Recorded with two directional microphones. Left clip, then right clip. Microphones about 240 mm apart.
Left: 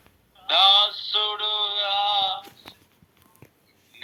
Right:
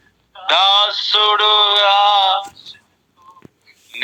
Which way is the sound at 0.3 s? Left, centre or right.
Right.